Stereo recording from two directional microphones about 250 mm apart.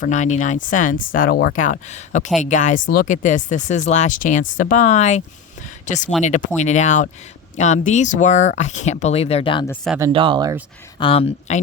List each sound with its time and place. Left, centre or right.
0.0 s speech: left
9.6 s speech: centre
10.0 s speech: right
11.0 s speech: left